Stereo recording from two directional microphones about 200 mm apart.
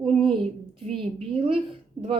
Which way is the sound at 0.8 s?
25° right (ahead or behind).